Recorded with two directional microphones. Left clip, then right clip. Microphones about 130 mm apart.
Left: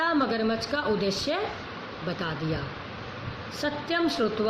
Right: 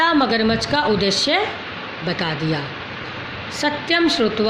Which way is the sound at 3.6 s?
20° right (ahead or behind).